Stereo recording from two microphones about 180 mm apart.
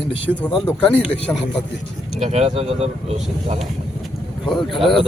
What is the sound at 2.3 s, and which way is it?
Speech, 35° right (ahead or behind).